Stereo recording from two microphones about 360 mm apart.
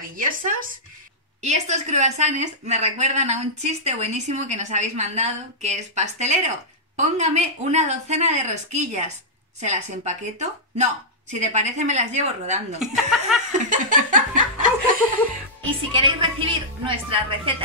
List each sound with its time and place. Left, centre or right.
0.1 s a woman's voice: right
12.9 s speech: centre
13.5 s a woman's voice: right
15.9 s a woman's voice: centre